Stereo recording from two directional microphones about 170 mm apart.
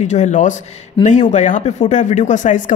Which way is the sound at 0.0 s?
45° left (ahead or behind).